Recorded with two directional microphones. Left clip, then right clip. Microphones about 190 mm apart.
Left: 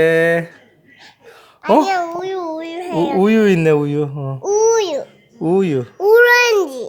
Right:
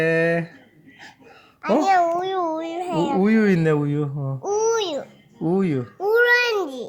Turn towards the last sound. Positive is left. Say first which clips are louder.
# left 7 dB
turn(degrees=25)  # may be behind; listen again after turning